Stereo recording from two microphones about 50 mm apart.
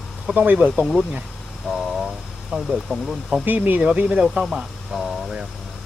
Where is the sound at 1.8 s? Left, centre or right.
Centre.